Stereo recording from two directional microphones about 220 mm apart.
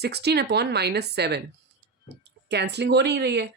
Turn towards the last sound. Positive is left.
turn(degrees=-50)  # may be behind; listen again after turning